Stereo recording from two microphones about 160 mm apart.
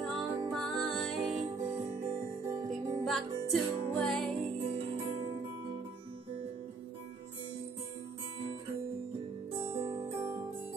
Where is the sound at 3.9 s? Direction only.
5° left (ahead or behind).